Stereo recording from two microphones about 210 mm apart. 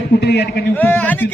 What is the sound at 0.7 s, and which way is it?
Speech, 5° left (ahead or behind).